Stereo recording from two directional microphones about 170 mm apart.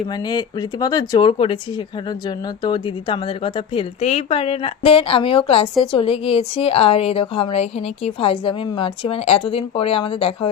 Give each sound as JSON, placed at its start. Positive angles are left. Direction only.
{"t": 0.1, "sound": "a woman's voice", "side_deg": 25}